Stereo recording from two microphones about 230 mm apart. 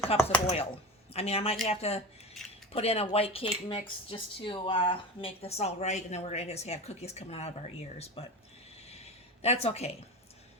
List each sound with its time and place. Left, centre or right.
0.2 s speech: centre
1.1 s speech: left
8.9 s a sound: left